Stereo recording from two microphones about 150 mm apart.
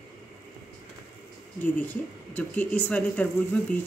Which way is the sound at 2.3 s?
10° left (ahead or behind).